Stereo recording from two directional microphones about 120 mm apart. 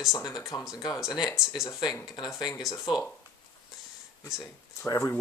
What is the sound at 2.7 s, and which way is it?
Speech, 25° left (ahead or behind).